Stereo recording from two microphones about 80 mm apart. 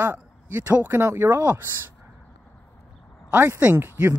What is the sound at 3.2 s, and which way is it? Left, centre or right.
Speech, right.